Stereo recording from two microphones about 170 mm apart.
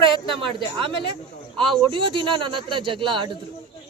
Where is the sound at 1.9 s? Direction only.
30° right (ahead or behind).